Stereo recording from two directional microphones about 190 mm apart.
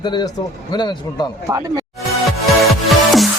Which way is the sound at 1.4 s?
15° right (ahead or behind).